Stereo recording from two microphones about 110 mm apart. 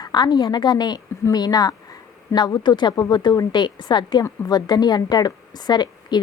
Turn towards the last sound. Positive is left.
turn(degrees=40)  # may be behind; listen again after turning